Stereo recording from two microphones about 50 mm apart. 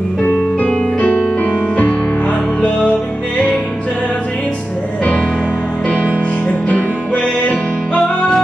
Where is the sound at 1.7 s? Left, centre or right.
Left.